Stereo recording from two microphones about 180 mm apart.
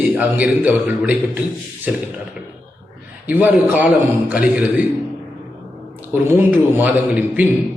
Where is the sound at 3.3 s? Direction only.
10° right (ahead or behind).